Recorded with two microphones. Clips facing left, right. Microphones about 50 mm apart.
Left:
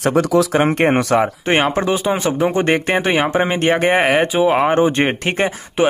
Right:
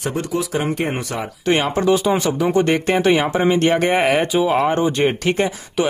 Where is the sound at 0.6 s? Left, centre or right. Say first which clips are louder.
Left 7 dB; left.